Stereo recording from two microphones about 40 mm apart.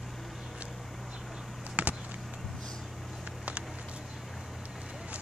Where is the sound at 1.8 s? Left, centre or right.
Right.